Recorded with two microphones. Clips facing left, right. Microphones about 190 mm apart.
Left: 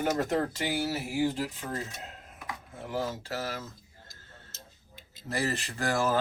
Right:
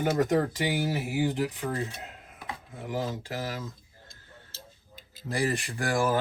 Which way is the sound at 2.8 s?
15° right (ahead or behind).